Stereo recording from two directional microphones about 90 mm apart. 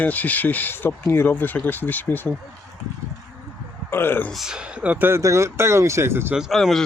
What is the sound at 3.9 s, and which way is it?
Speech, 25° left (ahead or behind).